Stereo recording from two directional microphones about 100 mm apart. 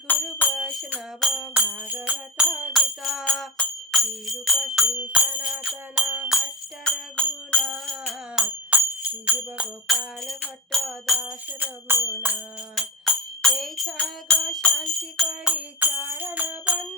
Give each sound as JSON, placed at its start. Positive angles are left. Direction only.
{"t": 0.5, "sound": "music", "side_deg": 0}
{"t": 1.4, "sound": "music", "side_deg": -15}
{"t": 2.7, "sound": "music", "side_deg": 0}
{"t": 6.2, "sound": "jingle bell", "side_deg": -5}
{"t": 6.8, "sound": "music", "side_deg": 10}
{"t": 8.7, "sound": "jingle bell", "side_deg": -10}
{"t": 9.8, "sound": "music", "side_deg": 0}
{"t": 11.6, "sound": "music", "side_deg": -15}
{"t": 12.7, "sound": "music", "side_deg": 0}
{"t": 15.4, "sound": "music", "side_deg": -15}